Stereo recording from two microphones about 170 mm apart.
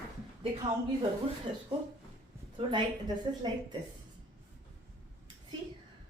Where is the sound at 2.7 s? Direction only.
25° right (ahead or behind).